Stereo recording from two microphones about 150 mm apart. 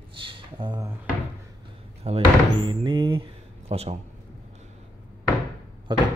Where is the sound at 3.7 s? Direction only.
45° right (ahead or behind).